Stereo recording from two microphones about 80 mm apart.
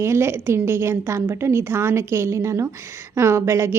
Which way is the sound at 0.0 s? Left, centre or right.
Right.